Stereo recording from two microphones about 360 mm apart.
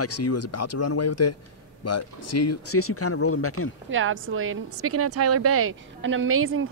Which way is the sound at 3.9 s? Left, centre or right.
Right.